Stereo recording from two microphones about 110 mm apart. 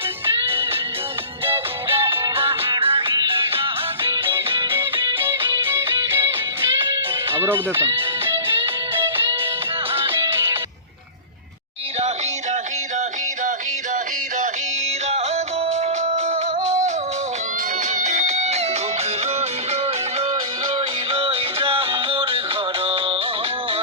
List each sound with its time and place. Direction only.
0.4 s music: 55° right (ahead or behind)
5.2 s music: 25° right (ahead or behind)
7.3 s speech: 20° right (ahead or behind)
8.2 s music: 50° right (ahead or behind)
10.1 s music: 20° right (ahead or behind)
15.6 s music: 80° right
17.9 s music: 90° right
19.4 s music: 70° right (ahead or behind); by 22.4 s 55° right (ahead or behind)